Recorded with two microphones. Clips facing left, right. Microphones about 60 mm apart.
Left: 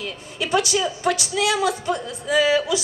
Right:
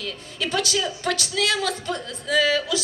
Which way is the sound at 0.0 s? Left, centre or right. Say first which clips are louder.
Left 1 dB; centre.